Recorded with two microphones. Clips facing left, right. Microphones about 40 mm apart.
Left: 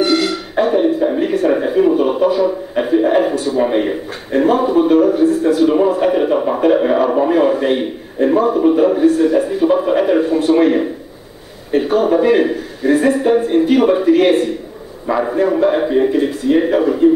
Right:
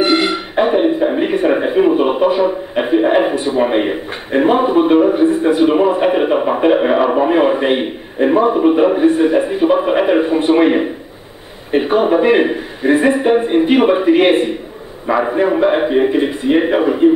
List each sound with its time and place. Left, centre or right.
0.0 s speech: right